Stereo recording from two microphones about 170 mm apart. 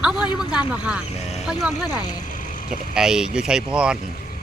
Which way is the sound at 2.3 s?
50° left (ahead or behind).